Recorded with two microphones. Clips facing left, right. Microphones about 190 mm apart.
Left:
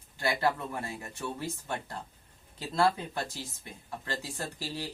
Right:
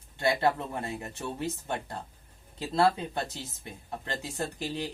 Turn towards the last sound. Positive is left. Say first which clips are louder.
# right 4 dB
turn(degrees=-20)  # may be behind; listen again after turning